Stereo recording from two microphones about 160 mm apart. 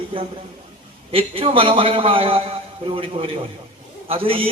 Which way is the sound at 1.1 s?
35° right (ahead or behind).